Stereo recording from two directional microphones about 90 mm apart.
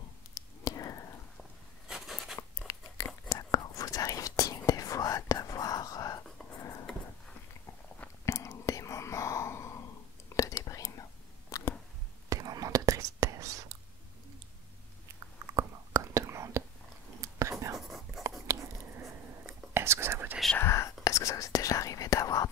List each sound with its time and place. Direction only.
0.3 s whispering: 40° left (ahead or behind)
1.9 s writing: 5° right (ahead or behind)
2.6 s a sound: 40° left (ahead or behind)
3.3 s whispering: 40° left (ahead or behind)
6.6 s a sound: 35° left (ahead or behind)
8.3 s whispering: 35° left (ahead or behind)
11.5 s a sound: 40° left (ahead or behind)
12.3 s whispering: 40° right (ahead or behind)
15.5 s whispering: 35° right (ahead or behind)
17.7 s writing: centre (ahead or behind)
18.5 s whispering: 35° right (ahead or behind)
20.5 s whispering: 30° left (ahead or behind)